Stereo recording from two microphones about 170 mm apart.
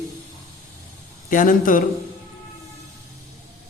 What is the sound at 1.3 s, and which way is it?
Speech, 50° left (ahead or behind).